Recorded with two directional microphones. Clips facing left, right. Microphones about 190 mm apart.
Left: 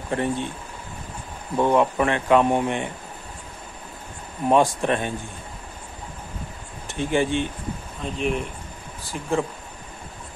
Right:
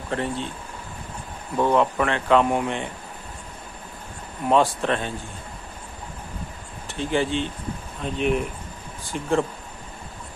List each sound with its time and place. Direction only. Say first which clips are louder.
0.1 s a man's voice: left 2 dB; 15° left (ahead or behind)
1.6 s a man's voice: left 1 dB; 15° left (ahead or behind)
4.5 s a man's voice: left 1 dB; 15° left (ahead or behind)
6.9 s speech: left 1 dB; 15° left (ahead or behind)
8.0 s speech: right 2 dB; centre (ahead or behind)